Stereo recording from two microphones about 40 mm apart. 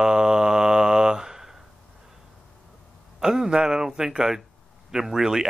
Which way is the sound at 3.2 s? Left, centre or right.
Centre.